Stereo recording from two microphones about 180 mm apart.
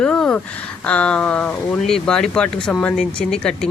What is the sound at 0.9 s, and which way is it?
Speech, 5° left (ahead or behind).